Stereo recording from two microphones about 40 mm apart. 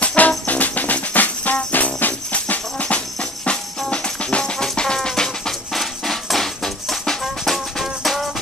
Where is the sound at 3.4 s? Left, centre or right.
Left.